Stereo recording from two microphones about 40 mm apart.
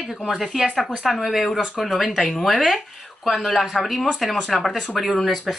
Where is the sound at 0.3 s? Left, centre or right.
Centre.